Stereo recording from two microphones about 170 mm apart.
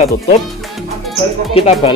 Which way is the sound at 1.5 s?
35° left (ahead or behind).